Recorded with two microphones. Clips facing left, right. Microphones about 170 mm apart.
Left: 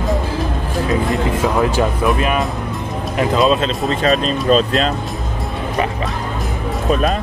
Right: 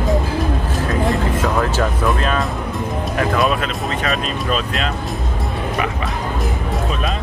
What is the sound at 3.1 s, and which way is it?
Speech, 20° left (ahead or behind).